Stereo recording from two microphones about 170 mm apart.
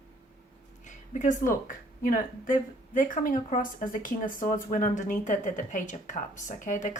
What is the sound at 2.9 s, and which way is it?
Speech, 50° left (ahead or behind).